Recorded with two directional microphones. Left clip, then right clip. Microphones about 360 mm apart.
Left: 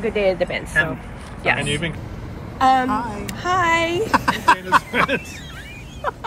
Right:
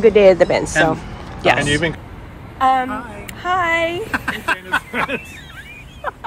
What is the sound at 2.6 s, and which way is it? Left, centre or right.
A woman's voice, centre.